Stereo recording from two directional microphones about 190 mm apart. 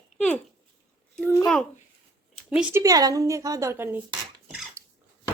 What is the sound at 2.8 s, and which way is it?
A woman's voice, 20° right (ahead or behind).